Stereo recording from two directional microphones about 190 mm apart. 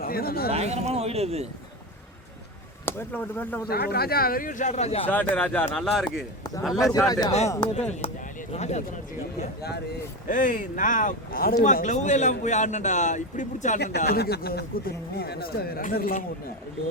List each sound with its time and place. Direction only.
0.0 s speech: 50° left (ahead or behind)
0.5 s speech: 35° right (ahead or behind)
2.8 s speech: 10° left (ahead or behind)
3.7 s speech: 55° left (ahead or behind); by 5.0 s 35° left (ahead or behind)
5.3 s speech: 10° left (ahead or behind)
6.8 s speech: 15° left (ahead or behind)
7.8 s speech: 35° left (ahead or behind)
10.2 s a man's voice: 45° left (ahead or behind)
13.7 s speech: 60° left (ahead or behind)